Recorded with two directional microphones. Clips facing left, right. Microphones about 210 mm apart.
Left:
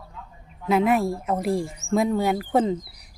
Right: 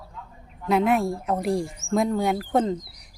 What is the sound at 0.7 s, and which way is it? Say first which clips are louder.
Speech: left 1 dB; centre (ahead or behind).